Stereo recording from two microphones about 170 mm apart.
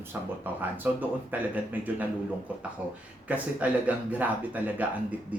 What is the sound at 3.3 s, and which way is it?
A man's voice, 10° right (ahead or behind).